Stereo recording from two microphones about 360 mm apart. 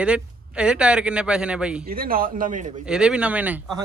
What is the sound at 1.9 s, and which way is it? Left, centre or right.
Speech, right.